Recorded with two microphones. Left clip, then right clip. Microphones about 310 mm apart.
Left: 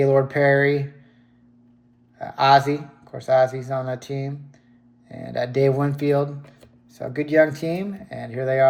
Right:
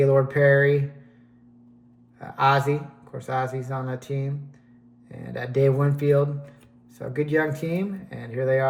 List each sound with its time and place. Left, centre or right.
0.0 s speech: centre
2.1 s speech: centre